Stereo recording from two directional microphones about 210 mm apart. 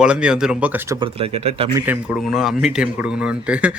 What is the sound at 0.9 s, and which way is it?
Speech, 25° right (ahead or behind).